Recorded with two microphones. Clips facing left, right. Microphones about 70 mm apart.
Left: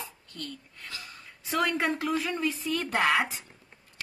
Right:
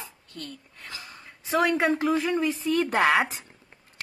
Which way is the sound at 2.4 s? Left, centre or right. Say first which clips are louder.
Right 5 dB; right.